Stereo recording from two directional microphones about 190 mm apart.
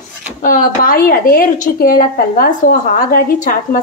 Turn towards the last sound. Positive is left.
turn(degrees=45)  # may be behind; listen again after turning